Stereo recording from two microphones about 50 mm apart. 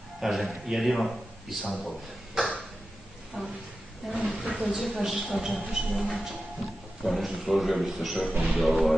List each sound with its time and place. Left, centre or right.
0.2 s a woman's voice: centre
3.4 s a sound: right
4.1 s a woman's voice: centre